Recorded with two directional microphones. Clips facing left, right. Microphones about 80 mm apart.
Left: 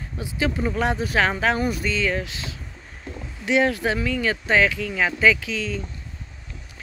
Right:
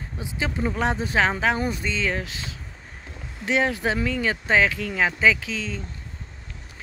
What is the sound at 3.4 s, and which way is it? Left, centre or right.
Speech, right.